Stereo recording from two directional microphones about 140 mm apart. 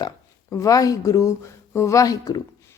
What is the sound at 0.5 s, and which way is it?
Speech, 25° left (ahead or behind).